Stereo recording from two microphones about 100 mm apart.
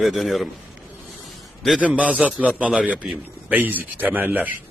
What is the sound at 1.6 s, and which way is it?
A man's voice, 10° right (ahead or behind).